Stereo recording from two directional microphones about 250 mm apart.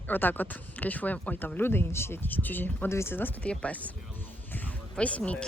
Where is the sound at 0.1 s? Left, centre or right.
Centre.